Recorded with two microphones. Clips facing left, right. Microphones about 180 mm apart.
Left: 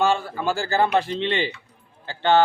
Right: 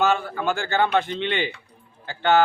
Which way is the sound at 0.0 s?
30° left (ahead or behind).